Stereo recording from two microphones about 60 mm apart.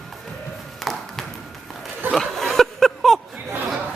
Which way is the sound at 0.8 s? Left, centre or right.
Centre.